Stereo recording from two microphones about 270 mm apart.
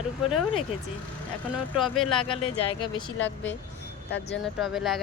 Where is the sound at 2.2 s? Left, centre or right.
Centre.